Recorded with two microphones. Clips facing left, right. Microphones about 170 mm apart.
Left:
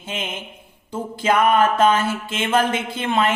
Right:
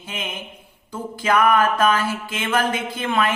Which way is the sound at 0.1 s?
25° left (ahead or behind).